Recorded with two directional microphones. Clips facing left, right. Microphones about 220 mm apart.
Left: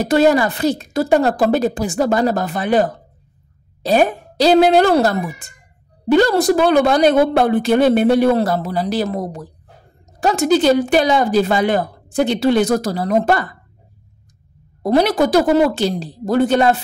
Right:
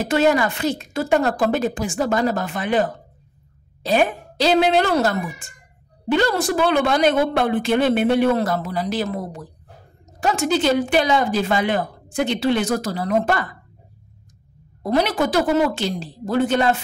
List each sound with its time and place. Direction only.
0.0 s speech: 35° left (ahead or behind)
14.8 s speech: 35° left (ahead or behind)